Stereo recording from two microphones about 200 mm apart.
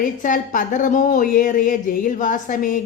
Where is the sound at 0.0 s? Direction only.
40° left (ahead or behind).